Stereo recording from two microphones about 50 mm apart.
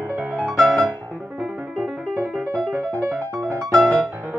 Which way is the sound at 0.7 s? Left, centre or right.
Centre.